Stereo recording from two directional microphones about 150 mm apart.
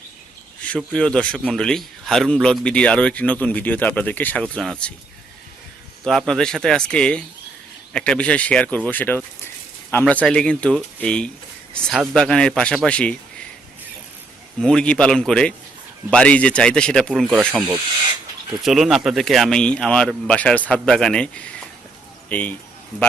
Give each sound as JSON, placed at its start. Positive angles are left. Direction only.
{"t": 0.6, "sound": "a man's voice", "side_deg": 5}
{"t": 6.1, "sound": "a man's voice", "side_deg": 0}
{"t": 14.6, "sound": "speech", "side_deg": 5}
{"t": 18.6, "sound": "speech", "side_deg": 0}